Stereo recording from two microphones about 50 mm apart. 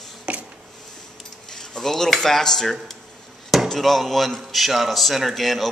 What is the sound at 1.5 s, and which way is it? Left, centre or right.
Speech, centre.